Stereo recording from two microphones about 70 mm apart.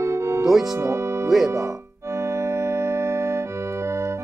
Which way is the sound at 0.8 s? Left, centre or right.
Right.